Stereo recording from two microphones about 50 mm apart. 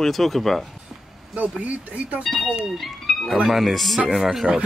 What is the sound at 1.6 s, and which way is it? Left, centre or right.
Speech, right.